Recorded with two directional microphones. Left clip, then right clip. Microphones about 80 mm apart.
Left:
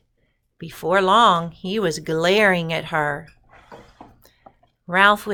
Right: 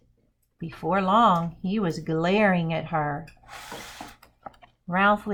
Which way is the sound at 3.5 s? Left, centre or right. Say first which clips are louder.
Right 5 dB; centre.